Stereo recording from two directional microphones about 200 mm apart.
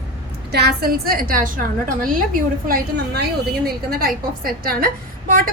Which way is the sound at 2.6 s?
45° right (ahead or behind).